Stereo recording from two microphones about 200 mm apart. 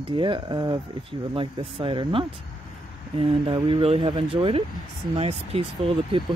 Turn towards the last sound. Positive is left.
turn(degrees=-25)  # may be behind; listen again after turning